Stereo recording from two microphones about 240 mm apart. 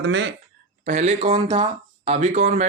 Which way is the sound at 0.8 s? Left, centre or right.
Right.